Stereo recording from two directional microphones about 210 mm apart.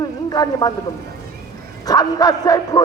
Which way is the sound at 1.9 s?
15° left (ahead or behind).